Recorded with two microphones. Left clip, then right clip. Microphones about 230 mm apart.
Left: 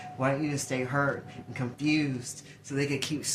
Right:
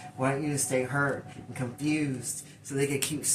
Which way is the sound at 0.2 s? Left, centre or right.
Left.